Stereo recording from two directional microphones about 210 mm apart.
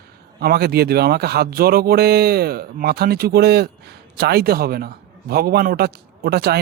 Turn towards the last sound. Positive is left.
turn(degrees=-50)  # may be behind; listen again after turning